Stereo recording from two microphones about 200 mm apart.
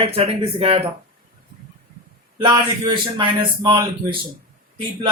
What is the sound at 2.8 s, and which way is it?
Speech, 20° right (ahead or behind).